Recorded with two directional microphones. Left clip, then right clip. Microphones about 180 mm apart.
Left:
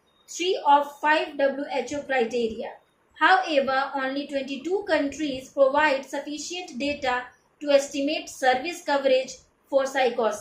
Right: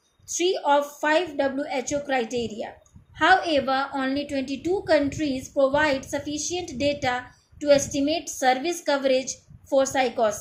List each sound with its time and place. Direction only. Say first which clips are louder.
0.3 s a woman's voice: left 1 dB; 50° right (ahead or behind)